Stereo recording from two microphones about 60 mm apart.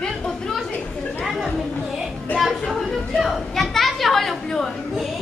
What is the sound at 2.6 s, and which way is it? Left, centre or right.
Chatter, centre.